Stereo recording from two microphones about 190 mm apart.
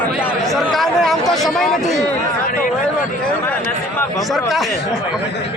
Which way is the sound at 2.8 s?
5° left (ahead or behind).